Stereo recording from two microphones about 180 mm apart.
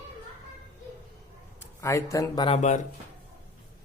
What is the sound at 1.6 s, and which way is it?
Speech, 15° left (ahead or behind).